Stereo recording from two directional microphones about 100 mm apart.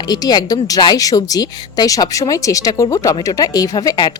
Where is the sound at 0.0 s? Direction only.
45° left (ahead or behind).